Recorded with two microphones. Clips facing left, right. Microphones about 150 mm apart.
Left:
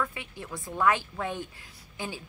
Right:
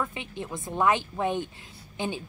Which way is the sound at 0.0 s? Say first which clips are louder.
Right 2 dB; 20° right (ahead or behind).